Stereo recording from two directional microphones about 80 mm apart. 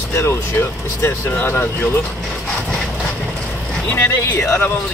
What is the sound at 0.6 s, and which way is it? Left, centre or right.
Speech, left.